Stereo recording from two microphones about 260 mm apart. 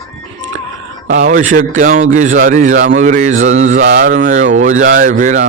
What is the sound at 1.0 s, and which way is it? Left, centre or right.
Speech, right.